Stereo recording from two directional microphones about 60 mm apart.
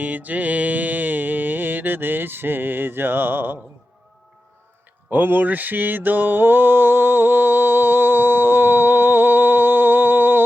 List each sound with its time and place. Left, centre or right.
0.0 s mantra: right
5.1 s mantra: right